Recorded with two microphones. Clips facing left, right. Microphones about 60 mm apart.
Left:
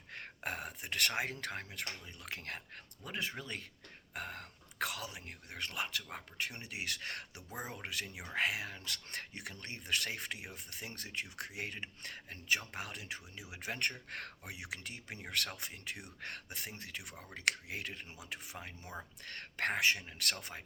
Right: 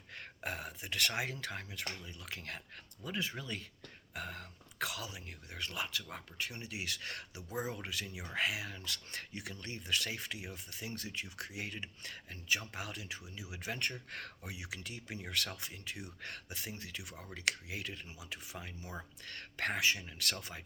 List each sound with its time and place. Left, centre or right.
0.1 s a sound: left
1.2 s speech: left
18.8 s speech: centre
19.2 s speech: left